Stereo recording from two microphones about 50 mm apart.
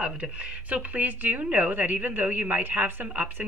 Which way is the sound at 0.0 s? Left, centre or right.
Right.